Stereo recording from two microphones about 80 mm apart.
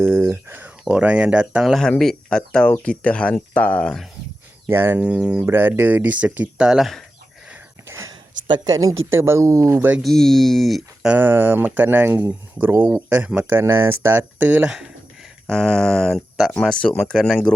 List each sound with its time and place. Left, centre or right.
0.0 s speech: right
1.6 s speech: centre
4.7 s speech: right
4.9 s speech: centre
5.5 s speech: right
6.7 s speech: centre
7.9 s a sound: right
8.6 s speech: right
9.1 s speech: right
10.0 s speech: centre
11.2 s speech: right
13.5 s speech: right
15.4 s speech: centre